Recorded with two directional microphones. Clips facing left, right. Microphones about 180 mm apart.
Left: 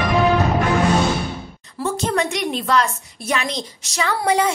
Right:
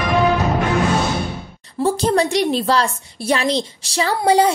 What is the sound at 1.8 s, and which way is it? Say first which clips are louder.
A woman's voice: right 5 dB; 35° right (ahead or behind).